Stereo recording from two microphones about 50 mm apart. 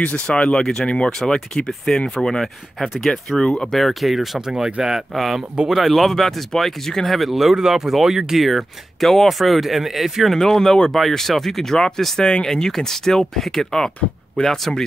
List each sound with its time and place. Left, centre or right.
0.0 s speech: left
3.8 s speech: centre
5.1 s speech: centre
10.3 s speech: centre
12.2 s speech: centre